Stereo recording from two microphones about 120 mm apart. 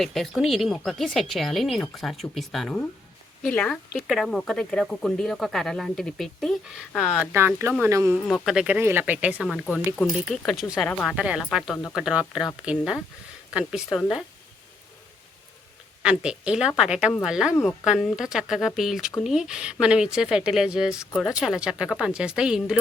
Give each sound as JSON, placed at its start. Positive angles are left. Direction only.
{"t": 0.0, "sound": "speech", "side_deg": 0}
{"t": 7.3, "sound": "speech", "side_deg": -20}
{"t": 8.1, "sound": "speech", "side_deg": 0}
{"t": 8.8, "sound": "speech", "side_deg": -20}
{"t": 9.7, "sound": "speech", "side_deg": 0}
{"t": 16.0, "sound": "speech", "side_deg": -5}